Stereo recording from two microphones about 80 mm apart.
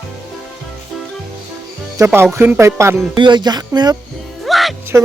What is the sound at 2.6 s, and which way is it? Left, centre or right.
Speech, right.